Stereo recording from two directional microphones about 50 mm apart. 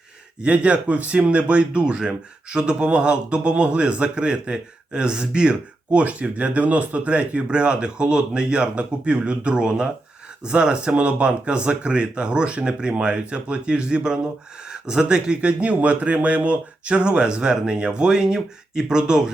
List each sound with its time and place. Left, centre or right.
0.4 s speech: right